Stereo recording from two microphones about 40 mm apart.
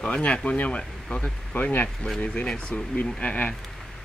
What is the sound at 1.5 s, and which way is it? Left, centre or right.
Speech, left.